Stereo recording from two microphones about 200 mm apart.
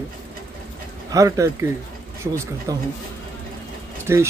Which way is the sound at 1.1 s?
15° right (ahead or behind).